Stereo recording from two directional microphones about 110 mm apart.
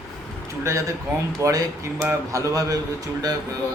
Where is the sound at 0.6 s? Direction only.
25° right (ahead or behind).